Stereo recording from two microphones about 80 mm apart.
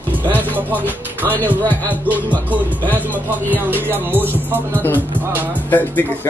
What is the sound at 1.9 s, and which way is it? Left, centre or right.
Music, centre.